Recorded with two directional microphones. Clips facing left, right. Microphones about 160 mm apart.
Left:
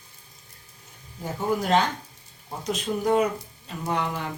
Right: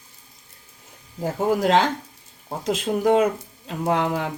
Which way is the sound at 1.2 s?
90° right.